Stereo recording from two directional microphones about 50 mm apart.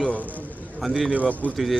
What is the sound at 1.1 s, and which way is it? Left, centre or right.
Speech, right.